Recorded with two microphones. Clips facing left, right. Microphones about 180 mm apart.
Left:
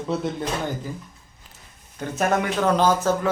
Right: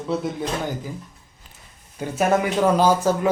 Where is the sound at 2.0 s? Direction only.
10° right (ahead or behind).